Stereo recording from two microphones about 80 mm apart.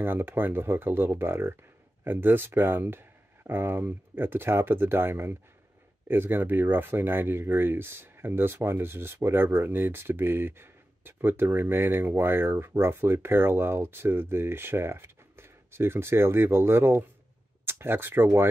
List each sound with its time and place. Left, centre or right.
0.0 s speech: right